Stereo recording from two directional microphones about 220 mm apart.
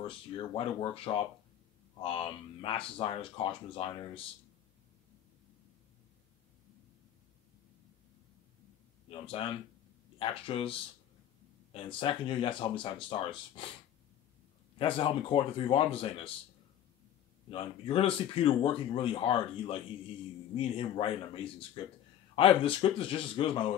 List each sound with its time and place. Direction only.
0.0 s speech: 25° left (ahead or behind)
9.1 s speech: 25° left (ahead or behind)
14.8 s speech: 25° left (ahead or behind)
17.5 s speech: 25° left (ahead or behind)